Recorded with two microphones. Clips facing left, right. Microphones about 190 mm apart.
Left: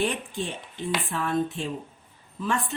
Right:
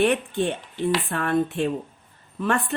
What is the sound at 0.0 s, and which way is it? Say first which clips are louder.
A woman's voice: right 7 dB; 65° right (ahead or behind).